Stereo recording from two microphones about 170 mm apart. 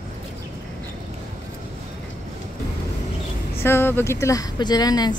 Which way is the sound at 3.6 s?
15° left (ahead or behind).